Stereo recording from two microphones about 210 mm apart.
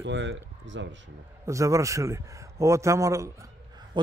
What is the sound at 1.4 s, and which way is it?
A man's voice, 15° right (ahead or behind).